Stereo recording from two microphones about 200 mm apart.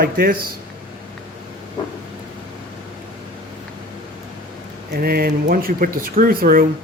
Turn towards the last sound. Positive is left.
turn(degrees=-45)  # may be behind; listen again after turning